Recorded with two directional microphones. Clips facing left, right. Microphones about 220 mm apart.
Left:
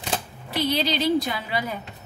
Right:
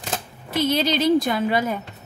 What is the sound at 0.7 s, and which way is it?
A woman's voice, 50° right (ahead or behind).